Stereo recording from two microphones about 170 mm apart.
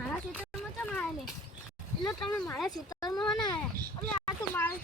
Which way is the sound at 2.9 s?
20° left (ahead or behind).